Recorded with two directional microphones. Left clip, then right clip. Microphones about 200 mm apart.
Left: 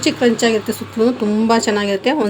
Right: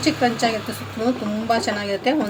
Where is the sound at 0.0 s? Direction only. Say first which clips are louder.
Left 4 dB; 55° left (ahead or behind).